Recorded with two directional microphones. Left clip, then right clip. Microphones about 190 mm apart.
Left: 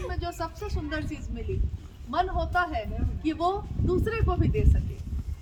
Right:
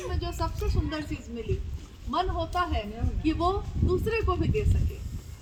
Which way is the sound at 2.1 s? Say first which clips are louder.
Left 2 dB; 5° left (ahead or behind).